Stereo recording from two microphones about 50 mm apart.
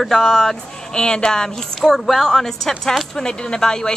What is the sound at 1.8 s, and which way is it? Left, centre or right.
Speech, centre.